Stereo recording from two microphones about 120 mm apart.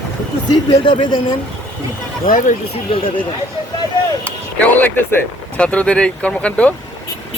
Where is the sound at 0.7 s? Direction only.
45° left (ahead or behind).